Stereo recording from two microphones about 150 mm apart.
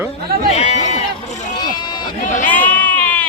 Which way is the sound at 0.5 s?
50° left (ahead or behind).